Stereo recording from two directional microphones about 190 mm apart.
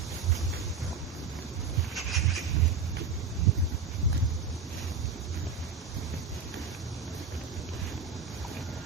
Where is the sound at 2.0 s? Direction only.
Centre (ahead or behind).